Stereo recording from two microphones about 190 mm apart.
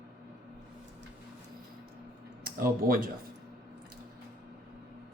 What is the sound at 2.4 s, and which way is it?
Speech, 50° right (ahead or behind).